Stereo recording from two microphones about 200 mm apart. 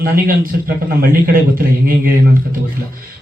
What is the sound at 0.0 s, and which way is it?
A man's voice, 45° right (ahead or behind).